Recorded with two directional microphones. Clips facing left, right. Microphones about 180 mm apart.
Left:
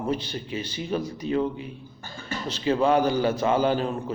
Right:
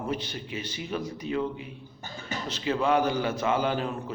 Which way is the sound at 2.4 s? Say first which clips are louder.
Left 4 dB; 30° left (ahead or behind).